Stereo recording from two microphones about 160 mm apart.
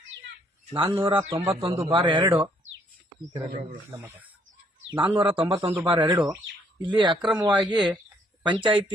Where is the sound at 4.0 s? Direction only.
15° right (ahead or behind).